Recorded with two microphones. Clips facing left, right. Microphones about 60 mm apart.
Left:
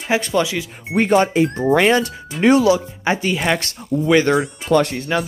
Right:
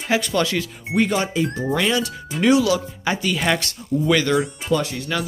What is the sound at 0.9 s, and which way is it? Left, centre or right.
Speech, left.